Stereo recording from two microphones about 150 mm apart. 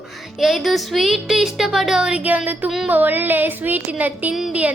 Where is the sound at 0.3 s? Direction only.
Centre (ahead or behind).